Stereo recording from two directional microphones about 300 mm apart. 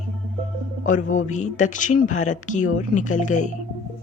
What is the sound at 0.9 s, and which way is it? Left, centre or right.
Speech, left.